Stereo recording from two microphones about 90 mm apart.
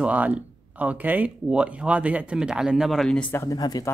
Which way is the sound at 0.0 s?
15° right (ahead or behind).